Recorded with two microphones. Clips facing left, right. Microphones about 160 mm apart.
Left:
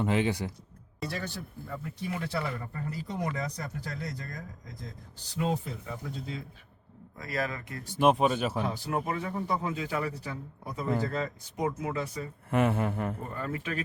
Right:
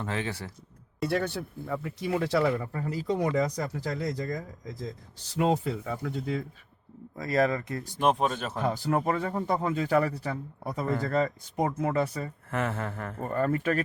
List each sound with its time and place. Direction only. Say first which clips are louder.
0.0 s a sound: left 5 dB; 15° left (ahead or behind)
1.0 s speech: right 8 dB; 60° right (ahead or behind)
7.2 s speech: right 8 dB; 45° right (ahead or behind)
7.9 s speech: left 2 dB; 5° left (ahead or behind)
8.6 s speech: right 5 dB; 45° right (ahead or behind)
12.5 s a sound: left 6 dB; 15° left (ahead or behind)
13.2 s speech: right 8 dB; 55° right (ahead or behind)